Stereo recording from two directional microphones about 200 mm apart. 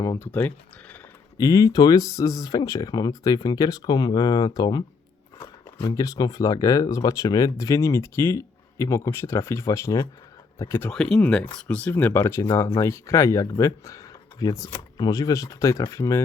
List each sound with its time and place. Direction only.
0.0 s speech: 15° left (ahead or behind)